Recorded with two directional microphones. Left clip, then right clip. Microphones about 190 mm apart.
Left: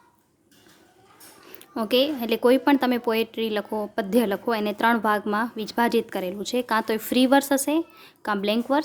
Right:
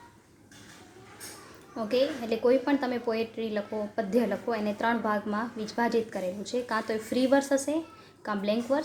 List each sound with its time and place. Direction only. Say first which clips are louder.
1.7 s a woman's voice: left 5 dB; 50° left (ahead or behind)